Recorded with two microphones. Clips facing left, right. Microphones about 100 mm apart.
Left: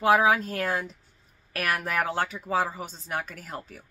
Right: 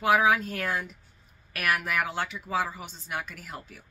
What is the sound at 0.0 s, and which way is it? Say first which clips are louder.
Speech: left 2 dB; 30° left (ahead or behind).